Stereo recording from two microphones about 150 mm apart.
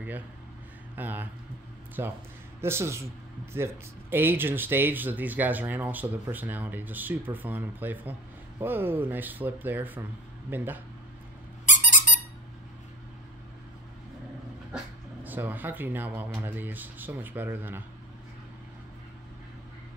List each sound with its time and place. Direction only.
0.9 s speech: 10° right (ahead or behind)
11.6 s squeak: 60° left (ahead or behind)
14.7 s dog: 5° right (ahead or behind)
15.2 s speech: 10° right (ahead or behind)